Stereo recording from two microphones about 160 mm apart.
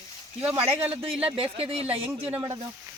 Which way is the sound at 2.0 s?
10° right (ahead or behind).